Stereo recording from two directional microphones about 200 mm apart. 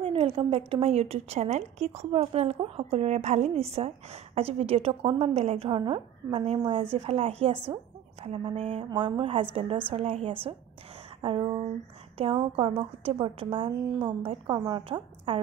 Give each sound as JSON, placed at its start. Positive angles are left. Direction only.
{"t": 0.0, "sound": "a woman's voice", "side_deg": -25}